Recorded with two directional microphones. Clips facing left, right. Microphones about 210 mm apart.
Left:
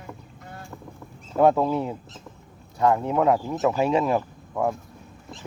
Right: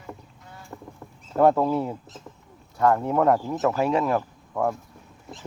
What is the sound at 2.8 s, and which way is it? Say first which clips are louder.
Speech: even; 15° left (ahead or behind).